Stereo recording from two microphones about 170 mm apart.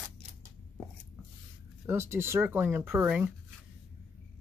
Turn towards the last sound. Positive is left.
turn(degrees=-10)  # may be behind; listen again after turning